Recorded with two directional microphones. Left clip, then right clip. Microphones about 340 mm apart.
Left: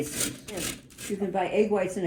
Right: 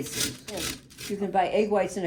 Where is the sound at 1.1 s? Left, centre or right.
Right.